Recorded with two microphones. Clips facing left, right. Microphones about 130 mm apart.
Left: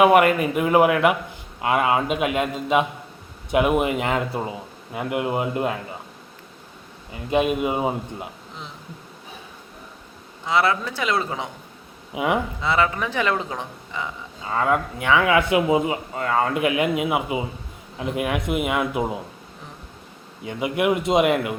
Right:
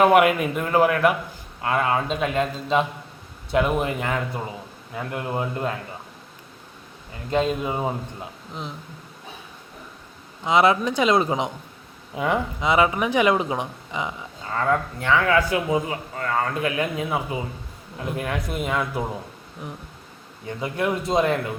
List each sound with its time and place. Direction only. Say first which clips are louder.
0.0 s a man's voice: left 1 dB; centre (ahead or behind); by 5.7 s 15° left (ahead or behind)
7.3 s a man's voice: left 2 dB; 15° left (ahead or behind)
10.4 s speech: right 3 dB; 20° right (ahead or behind)
12.1 s a man's voice: left 1 dB; 10° left (ahead or behind)
12.6 s speech: right 4 dB; 15° right (ahead or behind)
14.5 s a man's voice: left 1 dB; 10° left (ahead or behind)
15.4 s a man's voice: left 3 dB; 20° left (ahead or behind)
20.4 s a man's voice: left 3 dB; 15° left (ahead or behind)